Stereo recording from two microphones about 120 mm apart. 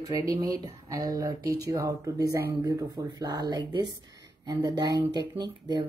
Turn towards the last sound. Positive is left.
turn(degrees=-35)  # may be behind; listen again after turning